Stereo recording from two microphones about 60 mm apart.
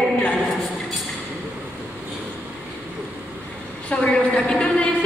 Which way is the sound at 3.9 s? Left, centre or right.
Centre.